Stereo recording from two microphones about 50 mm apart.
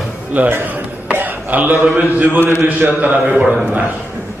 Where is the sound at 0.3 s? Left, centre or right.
Right.